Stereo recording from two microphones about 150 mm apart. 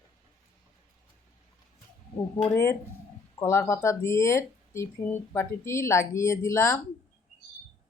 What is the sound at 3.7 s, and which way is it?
Speech, 20° left (ahead or behind).